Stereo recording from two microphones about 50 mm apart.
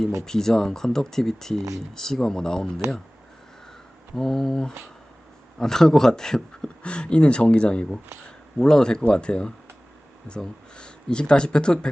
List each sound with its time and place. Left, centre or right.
0.3 s speech: centre
4.1 s speech: centre